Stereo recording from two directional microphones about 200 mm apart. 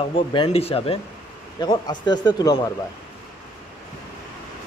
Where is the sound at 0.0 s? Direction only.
25° left (ahead or behind).